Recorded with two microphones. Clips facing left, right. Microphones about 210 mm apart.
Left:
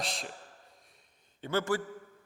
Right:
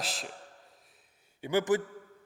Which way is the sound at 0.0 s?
Centre (ahead or behind).